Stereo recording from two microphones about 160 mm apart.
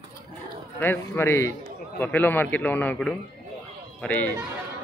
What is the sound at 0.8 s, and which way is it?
A man's voice, 15° left (ahead or behind).